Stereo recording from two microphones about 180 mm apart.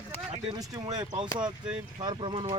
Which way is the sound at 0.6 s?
20° right (ahead or behind).